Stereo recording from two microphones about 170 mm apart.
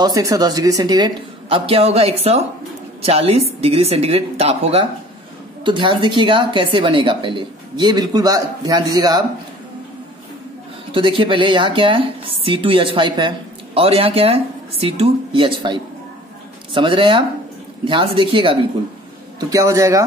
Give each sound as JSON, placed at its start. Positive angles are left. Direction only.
{"t": 0.0, "sound": "a woman's voice", "side_deg": -20}
{"t": 10.9, "sound": "a woman's voice", "side_deg": -30}
{"t": 19.5, "sound": "a woman's voice", "side_deg": -20}